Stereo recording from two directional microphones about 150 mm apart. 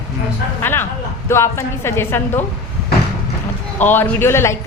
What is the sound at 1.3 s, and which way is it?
A woman's voice, 20° left (ahead or behind).